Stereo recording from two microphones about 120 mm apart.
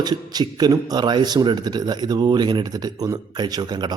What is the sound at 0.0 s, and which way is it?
A man's voice, 35° right (ahead or behind).